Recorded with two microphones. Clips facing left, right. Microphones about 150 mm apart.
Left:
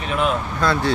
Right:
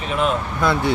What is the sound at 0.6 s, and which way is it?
Speech, 20° right (ahead or behind).